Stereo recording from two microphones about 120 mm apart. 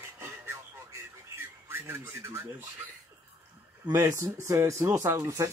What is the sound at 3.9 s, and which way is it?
Speech, 20° right (ahead or behind).